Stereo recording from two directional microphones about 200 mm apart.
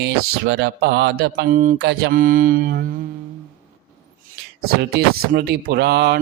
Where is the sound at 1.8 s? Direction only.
50° right (ahead or behind).